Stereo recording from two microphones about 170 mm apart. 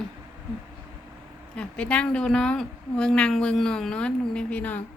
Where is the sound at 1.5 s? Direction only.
5° left (ahead or behind).